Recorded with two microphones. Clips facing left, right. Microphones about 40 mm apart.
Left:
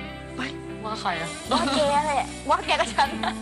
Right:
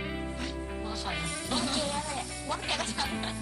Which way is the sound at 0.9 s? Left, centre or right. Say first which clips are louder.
Left 9 dB; left.